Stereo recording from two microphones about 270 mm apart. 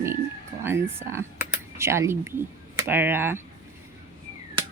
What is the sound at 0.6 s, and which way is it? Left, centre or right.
Speech, centre.